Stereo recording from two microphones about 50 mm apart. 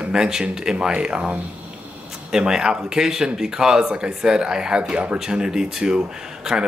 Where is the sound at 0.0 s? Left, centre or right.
Centre.